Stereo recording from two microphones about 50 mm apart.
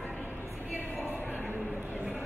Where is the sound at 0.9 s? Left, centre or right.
Left.